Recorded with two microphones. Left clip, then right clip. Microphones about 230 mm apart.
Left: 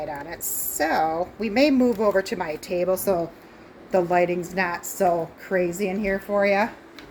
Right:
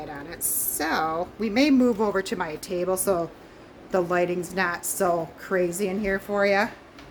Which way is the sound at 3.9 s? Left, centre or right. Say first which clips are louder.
Left 3 dB; centre.